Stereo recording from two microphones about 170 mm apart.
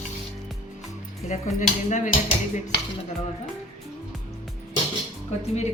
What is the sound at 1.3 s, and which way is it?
Speech, 45° left (ahead or behind).